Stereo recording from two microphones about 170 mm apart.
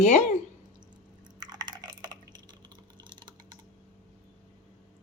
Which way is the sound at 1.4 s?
25° right (ahead or behind).